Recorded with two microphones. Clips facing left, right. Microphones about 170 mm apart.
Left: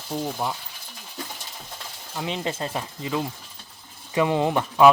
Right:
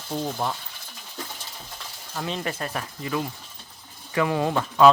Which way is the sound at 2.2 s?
20° left (ahead or behind).